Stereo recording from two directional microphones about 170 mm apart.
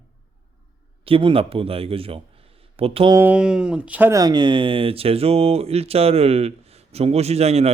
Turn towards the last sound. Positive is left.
turn(degrees=-40)  # may be behind; listen again after turning